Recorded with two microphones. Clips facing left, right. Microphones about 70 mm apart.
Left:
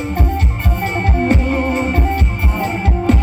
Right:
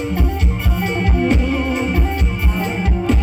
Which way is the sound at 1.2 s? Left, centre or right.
Left.